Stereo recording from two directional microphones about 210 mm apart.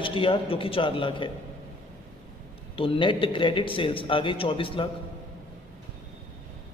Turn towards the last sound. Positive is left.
turn(degrees=25)  # may be behind; listen again after turning